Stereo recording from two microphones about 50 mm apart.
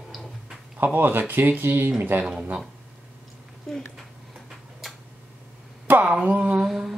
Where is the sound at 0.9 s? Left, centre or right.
Right.